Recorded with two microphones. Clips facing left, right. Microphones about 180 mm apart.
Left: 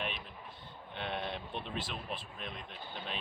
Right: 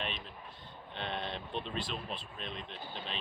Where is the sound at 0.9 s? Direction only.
10° left (ahead or behind).